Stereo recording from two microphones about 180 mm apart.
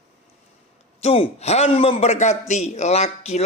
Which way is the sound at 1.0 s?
35° left (ahead or behind).